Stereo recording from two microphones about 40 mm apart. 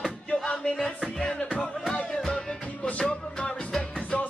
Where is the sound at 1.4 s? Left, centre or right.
Left.